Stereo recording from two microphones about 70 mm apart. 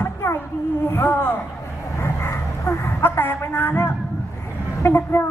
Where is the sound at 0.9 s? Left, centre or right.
Left.